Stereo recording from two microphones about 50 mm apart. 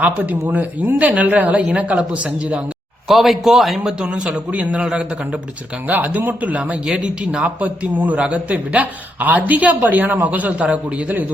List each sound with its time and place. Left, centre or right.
0.0 s a man's voice: right
3.1 s speech: centre
3.8 s speech: centre
5.9 s a man's voice: right
6.8 s a man's voice: centre